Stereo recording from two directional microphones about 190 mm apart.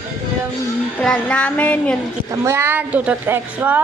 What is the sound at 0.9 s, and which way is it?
Speech, 5° left (ahead or behind).